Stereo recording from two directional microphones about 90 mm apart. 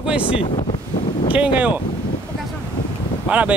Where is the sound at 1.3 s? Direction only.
15° right (ahead or behind).